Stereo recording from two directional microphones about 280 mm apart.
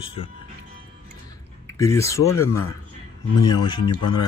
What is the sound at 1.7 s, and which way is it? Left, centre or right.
Speech, centre.